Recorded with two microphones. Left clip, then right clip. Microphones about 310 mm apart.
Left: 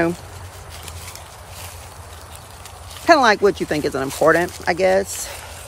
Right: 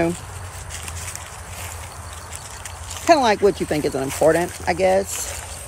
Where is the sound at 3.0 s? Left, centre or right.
Centre.